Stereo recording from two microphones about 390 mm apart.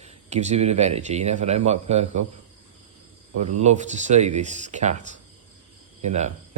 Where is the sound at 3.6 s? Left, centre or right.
Centre.